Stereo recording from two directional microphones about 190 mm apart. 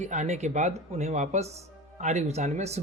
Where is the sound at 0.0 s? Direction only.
40° right (ahead or behind).